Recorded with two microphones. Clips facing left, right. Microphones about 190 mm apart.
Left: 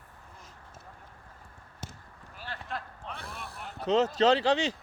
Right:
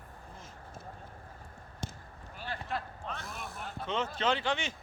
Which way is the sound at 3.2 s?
35° left (ahead or behind).